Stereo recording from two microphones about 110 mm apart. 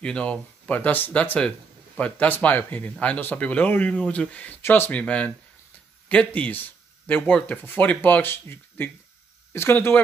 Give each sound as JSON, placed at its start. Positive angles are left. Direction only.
{"t": 0.0, "sound": "speech", "side_deg": 10}